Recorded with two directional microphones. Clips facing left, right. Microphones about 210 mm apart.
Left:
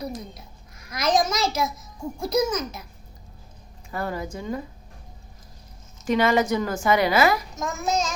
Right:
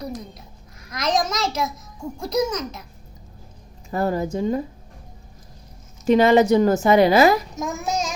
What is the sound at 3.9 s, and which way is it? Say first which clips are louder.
Speech: right 7 dB; 35° right (ahead or behind).